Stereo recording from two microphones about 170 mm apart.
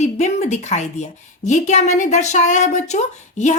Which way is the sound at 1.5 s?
45° left (ahead or behind).